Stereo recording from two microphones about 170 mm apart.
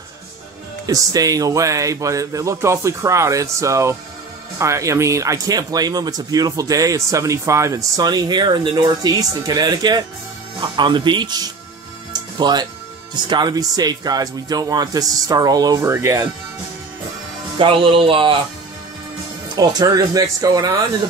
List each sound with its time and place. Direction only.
0.8 s speech: 20° right (ahead or behind)
12.1 s music: 25° right (ahead or behind)
13.1 s speech: 25° right (ahead or behind)
17.6 s speech: 30° right (ahead or behind)
19.5 s speech: 25° right (ahead or behind)